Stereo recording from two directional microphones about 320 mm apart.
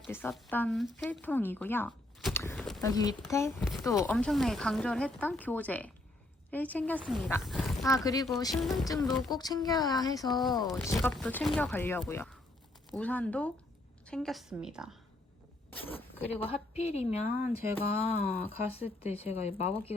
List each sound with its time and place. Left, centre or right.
0.0 s speech: centre
2.9 s speech: centre
7.9 s speech: centre
8.5 s speech: centre
8.8 s speech: centre
16.1 s speech: centre
16.5 s speech: centre